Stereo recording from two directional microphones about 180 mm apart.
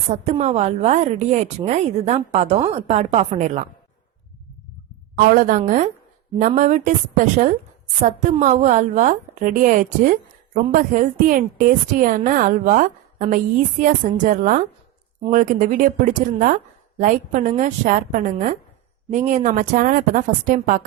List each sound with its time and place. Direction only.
0.1 s a woman's voice: 35° right (ahead or behind)
5.2 s a woman's voice: 45° right (ahead or behind)
8.0 s a woman's voice: 45° right (ahead or behind)